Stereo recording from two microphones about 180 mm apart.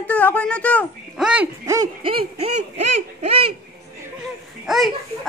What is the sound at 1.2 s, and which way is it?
Speech, 5° right (ahead or behind).